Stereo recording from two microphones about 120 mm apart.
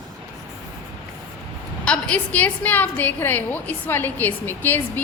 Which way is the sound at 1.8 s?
10° left (ahead or behind).